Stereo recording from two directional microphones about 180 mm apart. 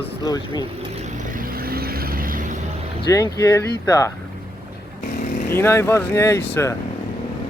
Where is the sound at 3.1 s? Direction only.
20° left (ahead or behind).